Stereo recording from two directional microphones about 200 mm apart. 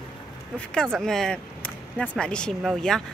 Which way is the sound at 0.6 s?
5° left (ahead or behind).